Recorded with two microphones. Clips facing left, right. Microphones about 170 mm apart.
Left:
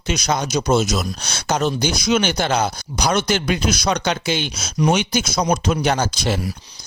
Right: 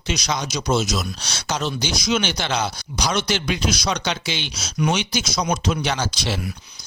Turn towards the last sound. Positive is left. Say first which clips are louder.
# left 4 dB
turn(degrees=45)  # may be behind; listen again after turning